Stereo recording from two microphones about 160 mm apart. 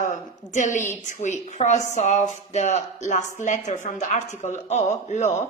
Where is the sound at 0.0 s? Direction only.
50° left (ahead or behind).